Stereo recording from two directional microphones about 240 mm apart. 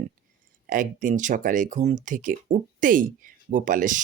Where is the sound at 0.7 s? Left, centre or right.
Right.